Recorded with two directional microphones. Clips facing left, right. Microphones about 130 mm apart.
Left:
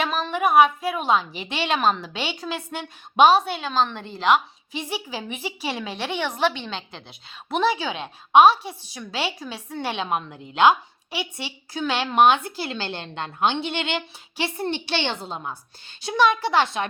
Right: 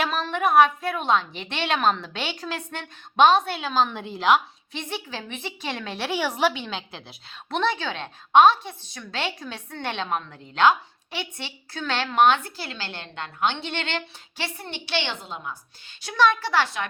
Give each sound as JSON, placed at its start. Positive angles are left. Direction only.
{"t": 0.0, "sound": "a woman's voice", "side_deg": 0}
{"t": 7.5, "sound": "a woman's voice", "side_deg": 5}
{"t": 14.6, "sound": "a woman's voice", "side_deg": 30}
{"t": 16.1, "sound": "a woman's voice", "side_deg": 15}